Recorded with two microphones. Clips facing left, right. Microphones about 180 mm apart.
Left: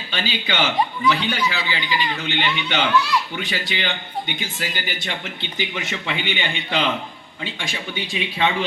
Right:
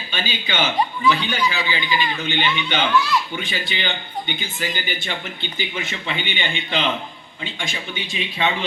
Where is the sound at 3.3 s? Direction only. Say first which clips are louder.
Left 1 dB; 75° left (ahead or behind).